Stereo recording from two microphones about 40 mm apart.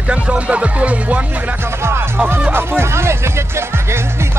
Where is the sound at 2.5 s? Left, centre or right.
Right.